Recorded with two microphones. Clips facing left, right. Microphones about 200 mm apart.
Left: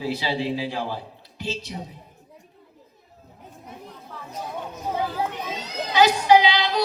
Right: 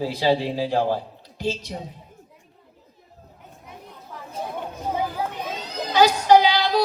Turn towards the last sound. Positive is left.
turn(degrees=-45)  # may be behind; listen again after turning